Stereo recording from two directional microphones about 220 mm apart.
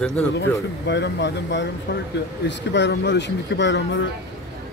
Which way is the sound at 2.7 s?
50° left (ahead or behind).